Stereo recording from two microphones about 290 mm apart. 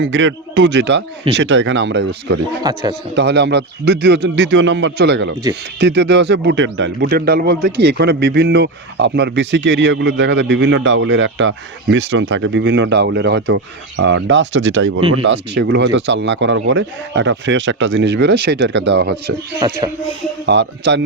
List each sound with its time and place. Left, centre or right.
0.0 s a man's voice: right
2.6 s speech: centre
3.2 s a man's voice: right
19.1 s speech: centre
20.5 s a man's voice: right